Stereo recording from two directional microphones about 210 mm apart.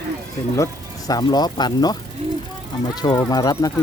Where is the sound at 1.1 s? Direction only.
20° left (ahead or behind).